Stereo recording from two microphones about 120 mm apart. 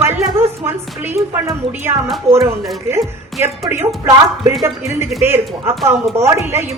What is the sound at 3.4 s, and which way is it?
A woman's voice, 20° right (ahead or behind).